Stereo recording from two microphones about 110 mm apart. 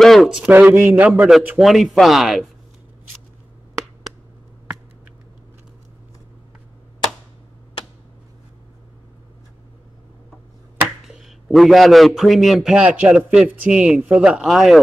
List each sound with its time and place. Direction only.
0.0 s a sound: centre (ahead or behind)
0.5 s a man's voice: 15° right (ahead or behind)
1.6 s a man's voice: centre (ahead or behind)
11.1 s a man's voice: 5° right (ahead or behind)